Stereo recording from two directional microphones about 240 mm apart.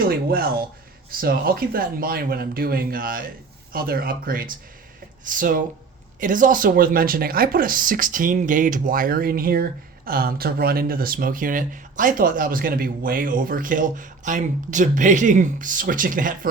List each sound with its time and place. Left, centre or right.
0.0 s speech: right